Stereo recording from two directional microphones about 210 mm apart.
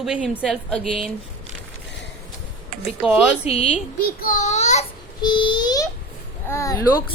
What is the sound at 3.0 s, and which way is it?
Speech, 5° right (ahead or behind).